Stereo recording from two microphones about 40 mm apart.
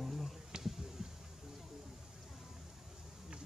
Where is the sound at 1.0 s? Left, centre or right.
Centre.